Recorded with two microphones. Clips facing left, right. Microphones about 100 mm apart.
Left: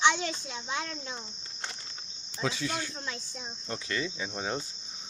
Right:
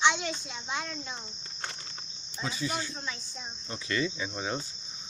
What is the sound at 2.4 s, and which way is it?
Speech, 90° left.